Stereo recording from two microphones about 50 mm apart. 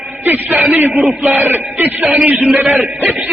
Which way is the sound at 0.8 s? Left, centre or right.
Right.